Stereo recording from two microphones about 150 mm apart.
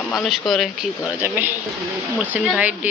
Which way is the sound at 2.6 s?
10° right (ahead or behind).